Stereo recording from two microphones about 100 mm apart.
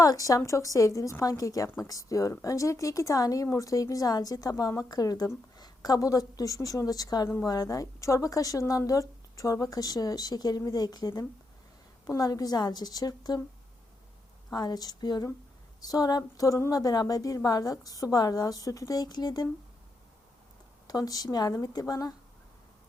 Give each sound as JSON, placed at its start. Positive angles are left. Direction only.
{"t": 0.0, "sound": "speech", "side_deg": 35}
{"t": 14.5, "sound": "speech", "side_deg": 40}
{"t": 20.8, "sound": "speech", "side_deg": 40}